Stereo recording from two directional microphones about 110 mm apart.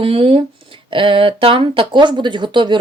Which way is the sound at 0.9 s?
50° right (ahead or behind).